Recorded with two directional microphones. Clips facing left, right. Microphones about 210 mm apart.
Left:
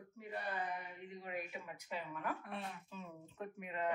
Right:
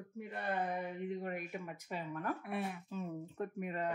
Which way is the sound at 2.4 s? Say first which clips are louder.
Right 7 dB; 10° right (ahead or behind).